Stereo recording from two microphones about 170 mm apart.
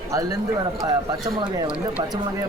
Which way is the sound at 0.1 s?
20° right (ahead or behind).